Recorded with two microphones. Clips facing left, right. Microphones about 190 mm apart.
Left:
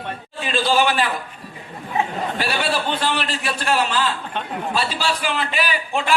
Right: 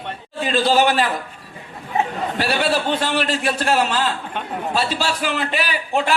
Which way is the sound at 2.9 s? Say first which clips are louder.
Right 3 dB; 45° right (ahead or behind).